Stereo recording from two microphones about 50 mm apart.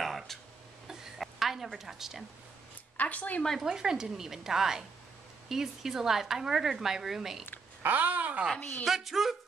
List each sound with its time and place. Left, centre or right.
0.0 s a sound: centre
3.0 s speech: left
3.6 s a woman's voice: centre
7.8 s speech: right
8.8 s a woman's voice: centre